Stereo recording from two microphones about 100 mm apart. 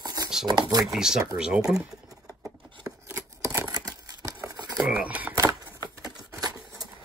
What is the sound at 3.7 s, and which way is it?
Camera, 40° right (ahead or behind).